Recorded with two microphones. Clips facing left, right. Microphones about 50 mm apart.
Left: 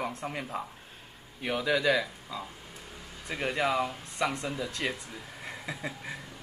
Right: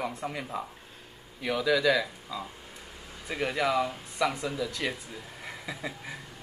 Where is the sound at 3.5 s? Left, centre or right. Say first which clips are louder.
Right 1 dB; centre.